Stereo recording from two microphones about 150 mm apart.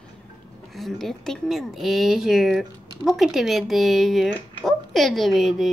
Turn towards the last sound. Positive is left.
turn(degrees=0)  # may be behind; listen again after turning